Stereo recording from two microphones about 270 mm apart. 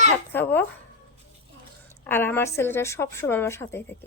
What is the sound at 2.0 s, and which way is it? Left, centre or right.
A woman's voice, centre.